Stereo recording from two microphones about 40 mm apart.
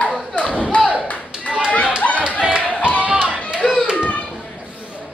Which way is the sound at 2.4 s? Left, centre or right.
Right.